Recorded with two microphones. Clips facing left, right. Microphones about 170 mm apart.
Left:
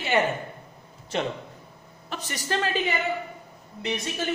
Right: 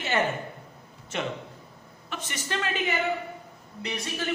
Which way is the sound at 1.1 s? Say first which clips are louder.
Left 3 dB; 35° left (ahead or behind).